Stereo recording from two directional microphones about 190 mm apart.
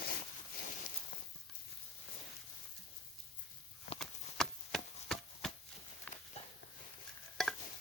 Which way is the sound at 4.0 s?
Centre (ahead or behind).